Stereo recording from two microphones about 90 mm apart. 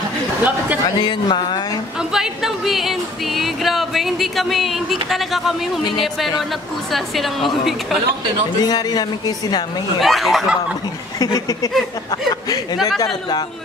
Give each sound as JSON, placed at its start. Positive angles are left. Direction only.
{"t": 1.0, "sound": "speech", "side_deg": 55}
{"t": 2.1, "sound": "music", "side_deg": -5}
{"t": 6.9, "sound": "music", "side_deg": 0}
{"t": 8.6, "sound": "a man's voice", "side_deg": 50}
{"t": 9.9, "sound": "music", "side_deg": 0}
{"t": 11.1, "sound": "speech", "side_deg": 40}